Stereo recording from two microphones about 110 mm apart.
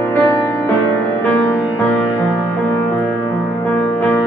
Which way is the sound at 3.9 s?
15° left (ahead or behind).